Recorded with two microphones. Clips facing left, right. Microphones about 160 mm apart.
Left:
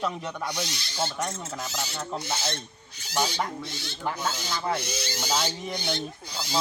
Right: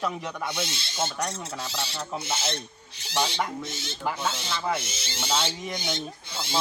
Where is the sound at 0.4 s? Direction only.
25° right (ahead or behind).